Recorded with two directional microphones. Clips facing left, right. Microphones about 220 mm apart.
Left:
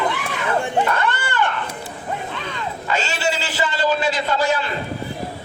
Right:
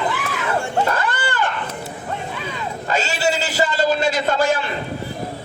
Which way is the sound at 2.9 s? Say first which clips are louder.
Right 2 dB; 40° right (ahead or behind).